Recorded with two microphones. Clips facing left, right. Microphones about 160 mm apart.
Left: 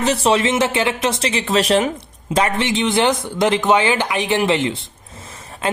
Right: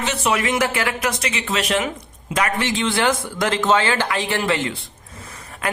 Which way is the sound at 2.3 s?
25° left (ahead or behind).